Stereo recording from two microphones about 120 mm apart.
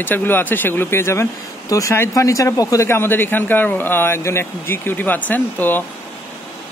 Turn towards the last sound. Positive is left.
turn(degrees=15)  # may be behind; listen again after turning